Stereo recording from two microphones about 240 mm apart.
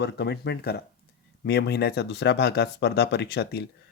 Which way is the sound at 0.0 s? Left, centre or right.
Left.